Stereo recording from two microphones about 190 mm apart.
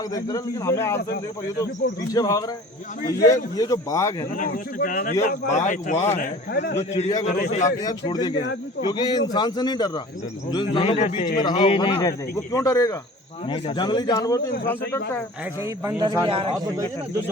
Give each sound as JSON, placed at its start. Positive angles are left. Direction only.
{"t": 0.1, "sound": "speech", "side_deg": 20}
{"t": 2.1, "sound": "a man's voice", "side_deg": 20}
{"t": 4.4, "sound": "a man's voice", "side_deg": 45}
{"t": 6.1, "sound": "a man's voice", "side_deg": 55}
{"t": 7.2, "sound": "a man's voice", "side_deg": 45}
{"t": 7.8, "sound": "a man's voice", "side_deg": 20}
{"t": 15.6, "sound": "a man's voice", "side_deg": -15}